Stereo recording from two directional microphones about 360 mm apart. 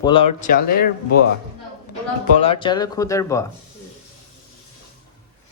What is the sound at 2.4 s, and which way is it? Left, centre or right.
Speech, centre.